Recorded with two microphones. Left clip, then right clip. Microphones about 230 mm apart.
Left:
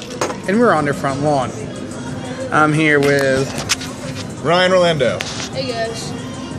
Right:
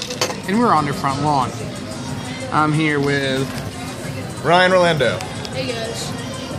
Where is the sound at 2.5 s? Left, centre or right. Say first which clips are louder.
Left 4 dB; right.